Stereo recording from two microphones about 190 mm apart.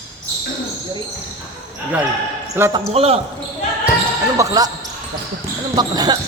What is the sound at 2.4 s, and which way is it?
Speech, 15° right (ahead or behind).